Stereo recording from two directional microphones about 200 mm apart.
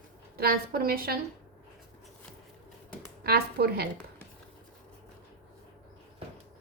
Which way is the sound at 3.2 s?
50° right (ahead or behind).